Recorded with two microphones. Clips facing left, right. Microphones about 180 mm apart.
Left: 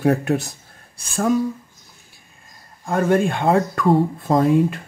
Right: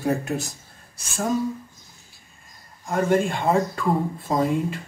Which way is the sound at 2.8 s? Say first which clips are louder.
Left 3 dB; 55° left (ahead or behind).